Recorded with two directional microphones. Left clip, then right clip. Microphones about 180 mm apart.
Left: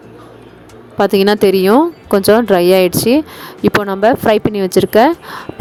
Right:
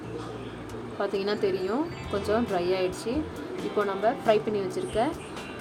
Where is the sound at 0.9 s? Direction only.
70° left (ahead or behind).